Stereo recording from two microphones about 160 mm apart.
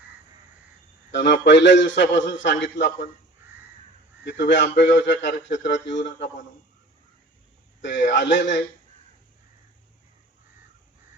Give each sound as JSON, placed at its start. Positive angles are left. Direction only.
{"t": 1.1, "sound": "a man's voice", "side_deg": 90}
{"t": 4.3, "sound": "a man's voice", "side_deg": 90}
{"t": 7.9, "sound": "a man's voice", "side_deg": 90}